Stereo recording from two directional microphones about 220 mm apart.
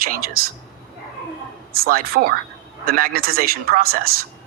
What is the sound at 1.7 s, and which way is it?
A man's voice, 45° right (ahead or behind).